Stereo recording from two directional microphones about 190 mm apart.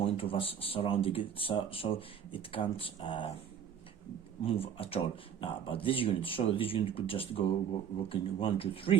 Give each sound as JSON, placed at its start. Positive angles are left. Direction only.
{"t": 0.0, "sound": "speech", "side_deg": 30}
{"t": 4.4, "sound": "speech", "side_deg": 30}